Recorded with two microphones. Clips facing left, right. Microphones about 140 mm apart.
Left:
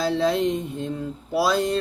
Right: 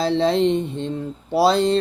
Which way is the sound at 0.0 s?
25° right (ahead or behind).